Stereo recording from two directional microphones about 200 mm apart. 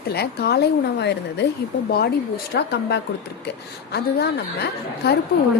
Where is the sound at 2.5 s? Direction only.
60° left (ahead or behind).